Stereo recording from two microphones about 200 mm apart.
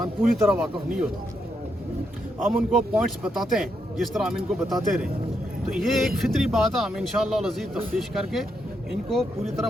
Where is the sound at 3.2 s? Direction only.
Centre (ahead or behind).